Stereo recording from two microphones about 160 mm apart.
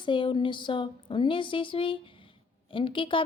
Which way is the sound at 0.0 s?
30° left (ahead or behind).